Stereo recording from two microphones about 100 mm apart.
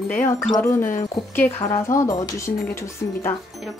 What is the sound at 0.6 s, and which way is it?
Speech, 25° left (ahead or behind).